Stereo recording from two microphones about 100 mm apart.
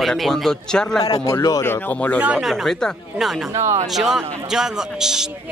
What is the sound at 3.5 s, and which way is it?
Speech, 30° right (ahead or behind).